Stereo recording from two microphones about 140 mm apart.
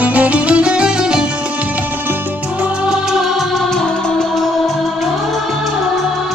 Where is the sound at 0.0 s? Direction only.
10° right (ahead or behind).